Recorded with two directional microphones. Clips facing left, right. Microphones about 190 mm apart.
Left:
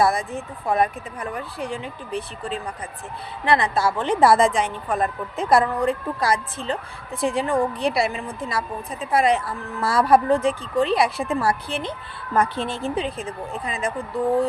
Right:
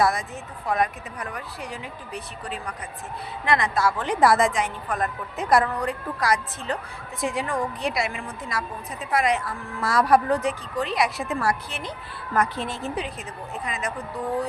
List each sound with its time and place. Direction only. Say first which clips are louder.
0.0 s a woman's voice: left 3 dB; 30° left (ahead or behind)